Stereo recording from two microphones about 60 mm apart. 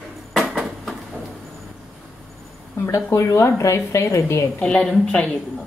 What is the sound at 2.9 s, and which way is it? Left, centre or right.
A woman's voice, left.